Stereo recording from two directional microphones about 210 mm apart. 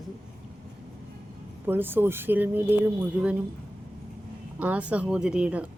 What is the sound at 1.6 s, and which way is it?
A woman's voice, 10° right (ahead or behind).